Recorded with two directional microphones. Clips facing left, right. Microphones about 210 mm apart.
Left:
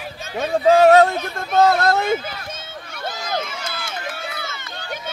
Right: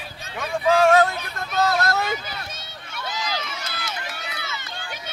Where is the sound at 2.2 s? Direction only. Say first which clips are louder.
Left 4 dB; 50° left (ahead or behind).